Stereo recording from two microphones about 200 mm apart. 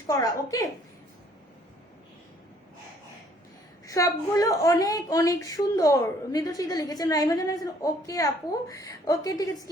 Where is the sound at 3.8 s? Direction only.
15° left (ahead or behind).